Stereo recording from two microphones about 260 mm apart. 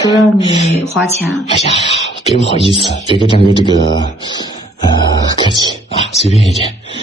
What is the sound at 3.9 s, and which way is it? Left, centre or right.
Speech, centre.